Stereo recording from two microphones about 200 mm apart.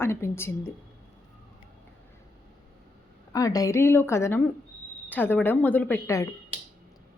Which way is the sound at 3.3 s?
15° left (ahead or behind).